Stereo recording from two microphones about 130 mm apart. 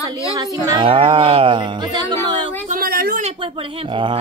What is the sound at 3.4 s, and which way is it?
Speech, 40° right (ahead or behind).